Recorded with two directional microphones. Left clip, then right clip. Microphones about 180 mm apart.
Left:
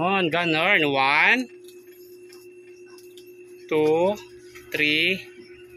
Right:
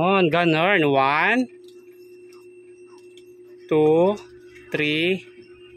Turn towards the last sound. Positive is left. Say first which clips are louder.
# left 1 dB
turn(degrees=-55)  # may be behind; listen again after turning